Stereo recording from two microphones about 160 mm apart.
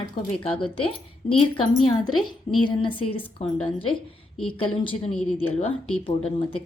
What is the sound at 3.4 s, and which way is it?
Speech, 40° left (ahead or behind).